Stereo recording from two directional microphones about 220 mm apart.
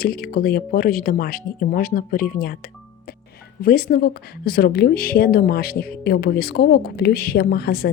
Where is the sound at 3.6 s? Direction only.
45° left (ahead or behind).